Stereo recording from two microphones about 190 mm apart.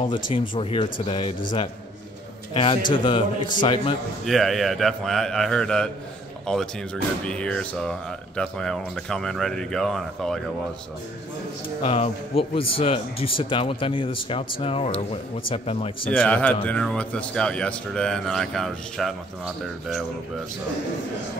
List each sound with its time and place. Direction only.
0.1 s a man's voice: 30° left (ahead or behind)
4.3 s speech: centre (ahead or behind)
11.8 s a man's voice: 30° left (ahead or behind)
16.1 s a man's voice: 5° left (ahead or behind)